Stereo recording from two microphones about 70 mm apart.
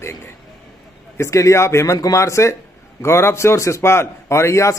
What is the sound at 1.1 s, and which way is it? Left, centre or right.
A man's voice, left.